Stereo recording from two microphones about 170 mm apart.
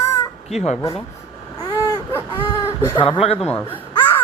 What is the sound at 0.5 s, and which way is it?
Speech, 40° left (ahead or behind).